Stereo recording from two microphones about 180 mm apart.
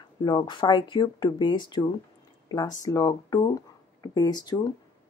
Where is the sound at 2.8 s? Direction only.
20° left (ahead or behind).